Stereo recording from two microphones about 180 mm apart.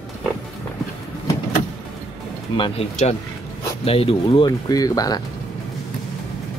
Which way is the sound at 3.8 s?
30° left (ahead or behind).